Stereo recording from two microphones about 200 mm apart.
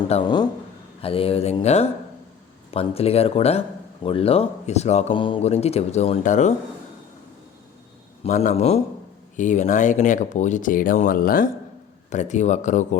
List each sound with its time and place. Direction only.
0.1 s a man's voice: 20° left (ahead or behind); by 6.5 s 35° left (ahead or behind)
8.2 s a man's voice: 35° left (ahead or behind)